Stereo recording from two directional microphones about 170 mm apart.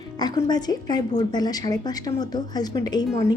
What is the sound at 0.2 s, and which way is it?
Speech, 25° left (ahead or behind).